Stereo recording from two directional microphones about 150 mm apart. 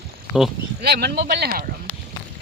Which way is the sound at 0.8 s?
90° right.